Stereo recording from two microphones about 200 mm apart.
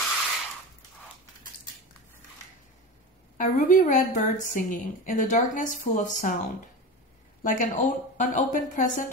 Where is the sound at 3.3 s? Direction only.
40° left (ahead or behind).